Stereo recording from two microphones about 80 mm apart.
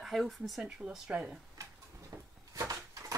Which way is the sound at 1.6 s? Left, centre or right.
Right.